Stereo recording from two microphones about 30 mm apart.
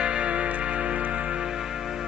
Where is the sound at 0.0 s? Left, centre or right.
Right.